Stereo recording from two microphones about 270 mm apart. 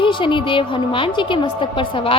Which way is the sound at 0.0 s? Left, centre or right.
Centre.